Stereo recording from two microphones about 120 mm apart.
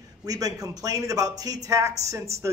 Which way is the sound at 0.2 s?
30° right (ahead or behind).